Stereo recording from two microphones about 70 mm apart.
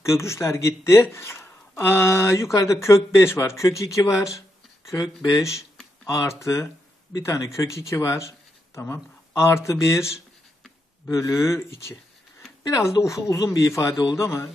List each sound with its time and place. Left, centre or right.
0.0 s speech: left
9.3 s speech: left
13.0 s speech: left